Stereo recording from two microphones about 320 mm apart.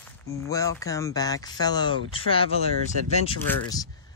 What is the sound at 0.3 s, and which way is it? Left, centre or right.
Speech, centre.